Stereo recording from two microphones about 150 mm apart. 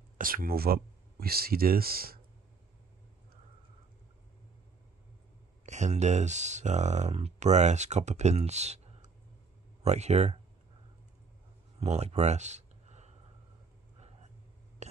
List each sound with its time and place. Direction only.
0.2 s speech: 75° right (ahead or behind)
5.7 s speech: 50° right (ahead or behind)
11.8 s a sound: 45° right (ahead or behind)